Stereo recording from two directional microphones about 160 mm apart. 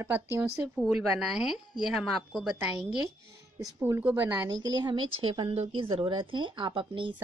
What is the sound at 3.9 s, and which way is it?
Speech, 10° right (ahead or behind).